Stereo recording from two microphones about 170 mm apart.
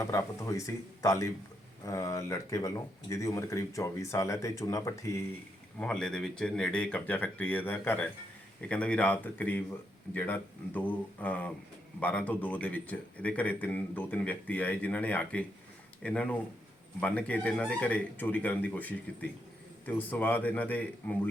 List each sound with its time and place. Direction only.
0.0 s a man's voice: 20° left (ahead or behind)
5.8 s a man's voice: 5° left (ahead or behind)